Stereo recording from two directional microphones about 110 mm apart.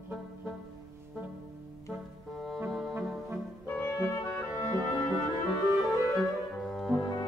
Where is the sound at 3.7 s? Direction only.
20° left (ahead or behind).